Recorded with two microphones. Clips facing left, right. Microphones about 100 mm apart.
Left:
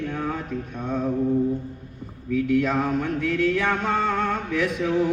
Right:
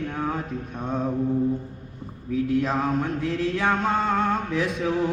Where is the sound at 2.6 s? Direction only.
30° right (ahead or behind).